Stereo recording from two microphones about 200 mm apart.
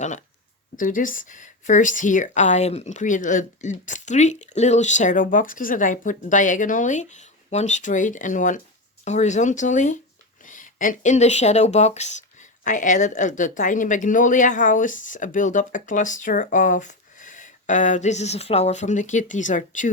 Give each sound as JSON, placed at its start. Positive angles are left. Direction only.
{"t": 0.0, "sound": "speech", "side_deg": 35}